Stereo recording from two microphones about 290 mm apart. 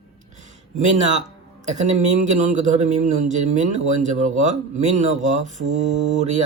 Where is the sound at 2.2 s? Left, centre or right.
Right.